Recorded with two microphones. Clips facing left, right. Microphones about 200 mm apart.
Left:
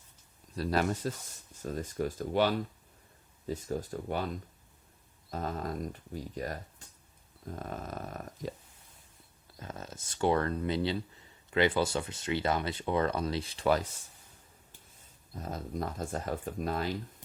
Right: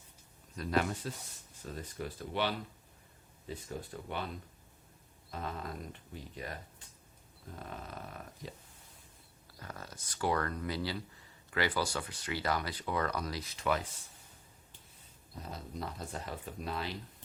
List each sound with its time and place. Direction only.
0.5 s speech: 35° left (ahead or behind)
5.3 s speech: 40° left (ahead or behind)
9.6 s speech: 20° left (ahead or behind)
15.4 s speech: 45° left (ahead or behind)